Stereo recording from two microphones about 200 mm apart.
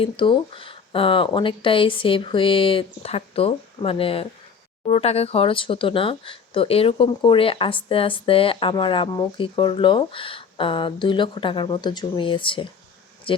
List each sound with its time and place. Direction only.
0.0 s speech: 25° left (ahead or behind)